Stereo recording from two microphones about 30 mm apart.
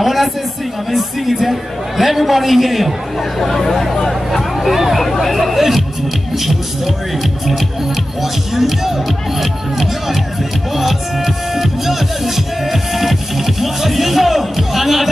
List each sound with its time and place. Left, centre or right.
0.0 s a sound: centre
0.9 s a man's voice: centre
3.3 s a man's voice: centre
8.2 s speech: centre
12.9 s music: centre